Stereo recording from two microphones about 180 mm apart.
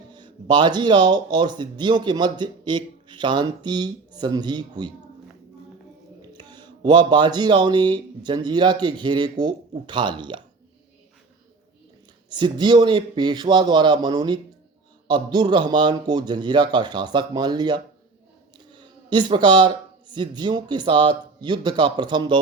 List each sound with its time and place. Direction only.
0.1 s speech: 25° right (ahead or behind)
6.3 s speech: 25° right (ahead or behind)
12.3 s speech: 25° right (ahead or behind)